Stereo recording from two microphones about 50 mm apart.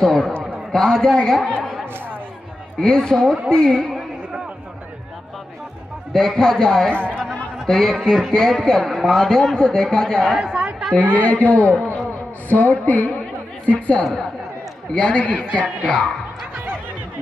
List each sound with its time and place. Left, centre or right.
0.0 s a man's voice: centre
1.6 s chatter: centre
2.8 s a man's voice: centre
6.1 s a man's voice: centre
6.9 s a man's voice: left
7.6 s a man's voice: centre
10.4 s a woman's voice: centre
11.1 s a man's voice: left; by 16.1 s centre